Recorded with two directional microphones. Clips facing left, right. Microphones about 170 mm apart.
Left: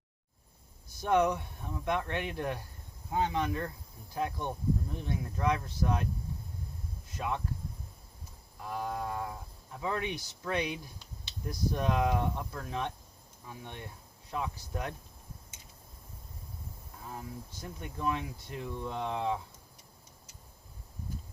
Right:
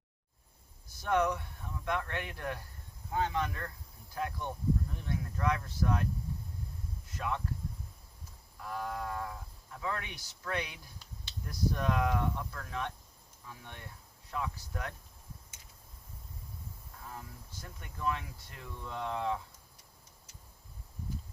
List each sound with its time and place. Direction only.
1.0 s speech: 20° left (ahead or behind)
7.2 s speech: 20° left (ahead or behind)
8.6 s speech: 20° left (ahead or behind)
17.1 s speech: 20° left (ahead or behind)